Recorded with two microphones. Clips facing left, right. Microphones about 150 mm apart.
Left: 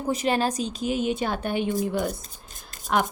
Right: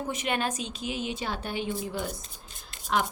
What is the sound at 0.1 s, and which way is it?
A woman's voice, 35° left (ahead or behind).